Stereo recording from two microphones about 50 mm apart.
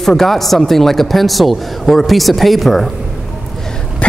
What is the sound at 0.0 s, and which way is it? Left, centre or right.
Speech, centre.